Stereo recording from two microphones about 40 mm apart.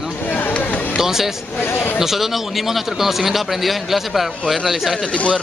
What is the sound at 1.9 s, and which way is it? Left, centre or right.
A man's voice, centre.